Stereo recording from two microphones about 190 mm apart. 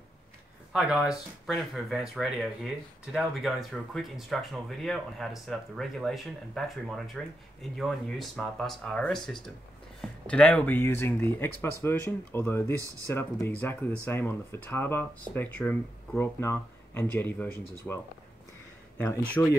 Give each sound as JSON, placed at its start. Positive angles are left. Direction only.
{"t": 0.7, "sound": "speech", "side_deg": -5}